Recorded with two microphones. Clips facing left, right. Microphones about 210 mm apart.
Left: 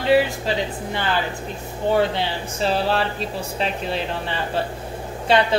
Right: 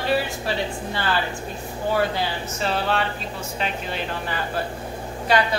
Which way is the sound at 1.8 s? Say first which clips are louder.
Left 3 dB; 25° left (ahead or behind).